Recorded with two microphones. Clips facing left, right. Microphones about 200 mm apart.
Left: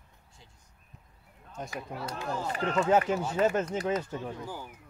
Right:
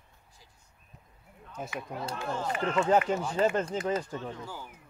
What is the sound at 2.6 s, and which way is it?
Speech, 40° left (ahead or behind).